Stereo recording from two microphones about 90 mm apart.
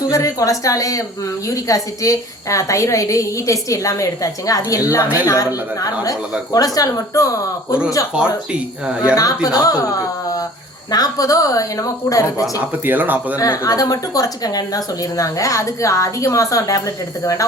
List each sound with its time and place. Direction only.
0.1 s a woman's voice: 40° left (ahead or behind)
6.5 s a woman's voice: 45° left (ahead or behind)
8.1 s speech: 10° right (ahead or behind)
9.1 s a woman's voice: 40° left (ahead or behind)
12.8 s speech: 20° right (ahead or behind)
13.5 s a woman's voice: 35° left (ahead or behind)